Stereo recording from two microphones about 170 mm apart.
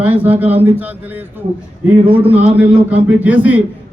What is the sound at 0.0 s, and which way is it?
Speech, 10° right (ahead or behind).